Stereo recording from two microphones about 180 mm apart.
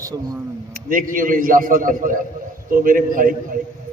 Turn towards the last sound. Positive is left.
turn(degrees=-50)  # may be behind; listen again after turning